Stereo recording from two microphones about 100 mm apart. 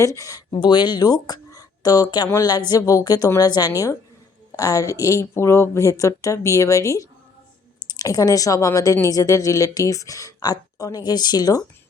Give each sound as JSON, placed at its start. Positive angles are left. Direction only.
{"t": 0.0, "sound": "speech", "side_deg": 30}